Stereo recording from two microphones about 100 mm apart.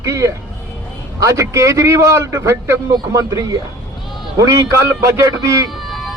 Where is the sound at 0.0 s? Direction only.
30° right (ahead or behind).